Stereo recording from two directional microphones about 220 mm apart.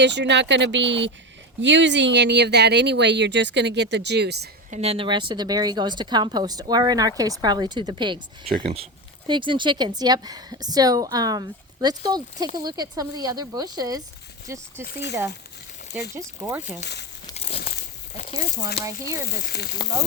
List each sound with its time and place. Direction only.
0.0 s speech: 50° right (ahead or behind)
4.7 s speech: 25° right (ahead or behind)
16.1 s speech: 10° right (ahead or behind)
16.8 s speech: 50° left (ahead or behind)
17.3 s crumpling: 30° left (ahead or behind)
18.8 s speech: 15° right (ahead or behind)
19.4 s speech: 45° left (ahead or behind)